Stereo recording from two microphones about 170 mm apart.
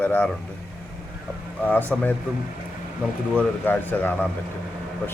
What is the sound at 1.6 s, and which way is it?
Speech, 10° left (ahead or behind).